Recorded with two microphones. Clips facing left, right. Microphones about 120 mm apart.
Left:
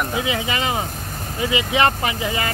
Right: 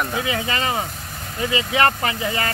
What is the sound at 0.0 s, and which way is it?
Speech, 15° left (ahead or behind).